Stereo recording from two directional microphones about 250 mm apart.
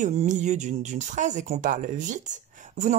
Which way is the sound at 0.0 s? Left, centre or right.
Right.